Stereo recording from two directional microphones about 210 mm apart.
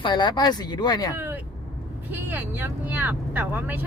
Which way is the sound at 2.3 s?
10° right (ahead or behind).